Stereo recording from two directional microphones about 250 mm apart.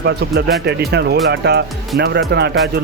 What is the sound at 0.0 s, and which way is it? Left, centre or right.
Speech, right.